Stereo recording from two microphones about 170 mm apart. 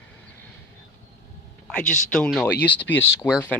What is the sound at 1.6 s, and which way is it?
Speech, 5° left (ahead or behind).